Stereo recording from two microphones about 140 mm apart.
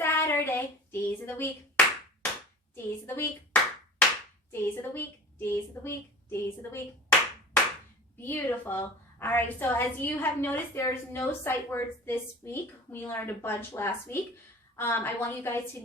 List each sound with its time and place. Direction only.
0.0 s clapping: 15° left (ahead or behind)
4.5 s a woman's voice: 15° left (ahead or behind)
8.2 s a woman's voice: 15° left (ahead or behind)